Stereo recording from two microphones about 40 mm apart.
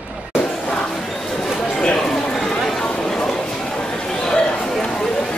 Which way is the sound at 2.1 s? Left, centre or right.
Centre.